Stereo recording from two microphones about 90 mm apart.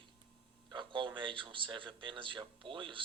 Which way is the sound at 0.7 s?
65° right (ahead or behind).